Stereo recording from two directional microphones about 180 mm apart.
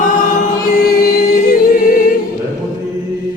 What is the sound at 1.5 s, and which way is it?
Music, 50° left (ahead or behind).